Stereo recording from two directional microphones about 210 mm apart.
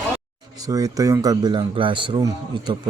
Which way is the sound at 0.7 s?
15° right (ahead or behind).